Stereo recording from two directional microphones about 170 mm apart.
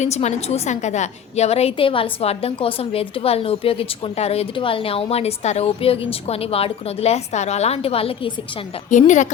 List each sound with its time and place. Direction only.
0.0 s a woman's voice: 40° left (ahead or behind)
8.9 s a woman's voice: 45° left (ahead or behind)